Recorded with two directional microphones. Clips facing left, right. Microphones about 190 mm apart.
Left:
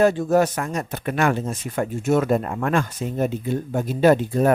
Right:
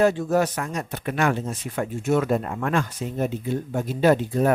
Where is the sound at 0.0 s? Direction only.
45° left (ahead or behind).